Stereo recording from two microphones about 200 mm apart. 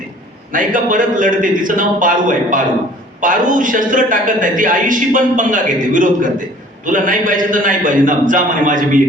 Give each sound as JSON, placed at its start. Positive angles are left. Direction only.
{"t": 0.5, "sound": "a man's voice", "side_deg": -40}